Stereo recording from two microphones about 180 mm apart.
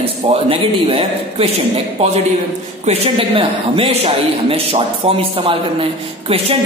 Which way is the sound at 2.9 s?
30° right (ahead or behind).